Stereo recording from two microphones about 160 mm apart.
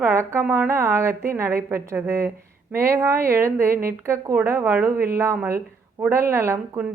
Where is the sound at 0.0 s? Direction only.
15° right (ahead or behind).